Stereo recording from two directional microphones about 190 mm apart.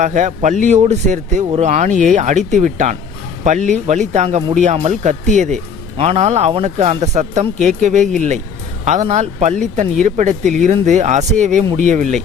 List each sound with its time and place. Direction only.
0.0 s speech: 40° right (ahead or behind)